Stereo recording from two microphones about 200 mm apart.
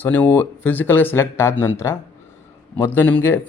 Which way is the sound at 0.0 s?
10° left (ahead or behind).